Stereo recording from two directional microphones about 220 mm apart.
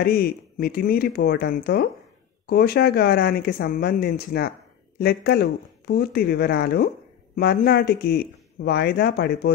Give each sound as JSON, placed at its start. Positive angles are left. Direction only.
{"t": 0.0, "sound": "speech", "side_deg": 45}